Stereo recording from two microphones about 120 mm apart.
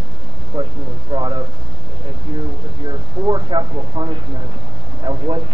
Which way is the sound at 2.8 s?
40° right (ahead or behind).